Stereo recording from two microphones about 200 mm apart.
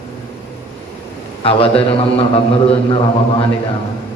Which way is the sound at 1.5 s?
30° left (ahead or behind).